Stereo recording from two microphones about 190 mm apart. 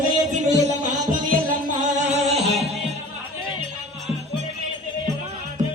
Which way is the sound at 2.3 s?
35° right (ahead or behind).